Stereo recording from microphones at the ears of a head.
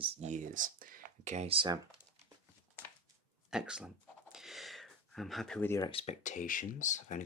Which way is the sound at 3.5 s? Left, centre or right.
Centre.